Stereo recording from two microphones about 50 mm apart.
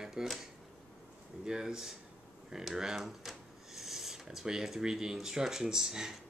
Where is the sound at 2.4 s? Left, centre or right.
Centre.